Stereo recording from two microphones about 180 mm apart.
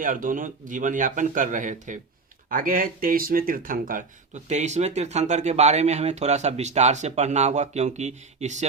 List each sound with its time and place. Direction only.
0.0 s speech: 50° right (ahead or behind)
4.4 s speech: 40° right (ahead or behind)